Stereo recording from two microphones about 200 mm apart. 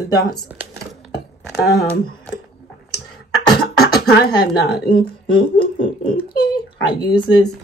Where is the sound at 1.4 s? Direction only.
15° left (ahead or behind).